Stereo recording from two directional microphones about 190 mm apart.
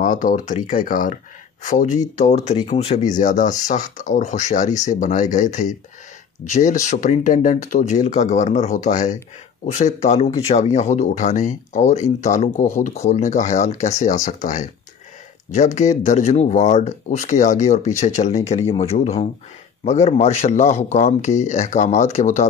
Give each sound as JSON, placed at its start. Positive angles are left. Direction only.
{"t": 0.0, "sound": "speech", "side_deg": 45}
{"t": 3.1, "sound": "speech", "side_deg": 40}